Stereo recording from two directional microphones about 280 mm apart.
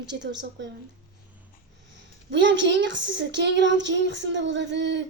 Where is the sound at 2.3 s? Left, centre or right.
Right.